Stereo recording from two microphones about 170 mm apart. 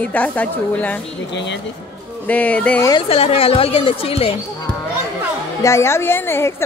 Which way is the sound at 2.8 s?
35° left (ahead or behind).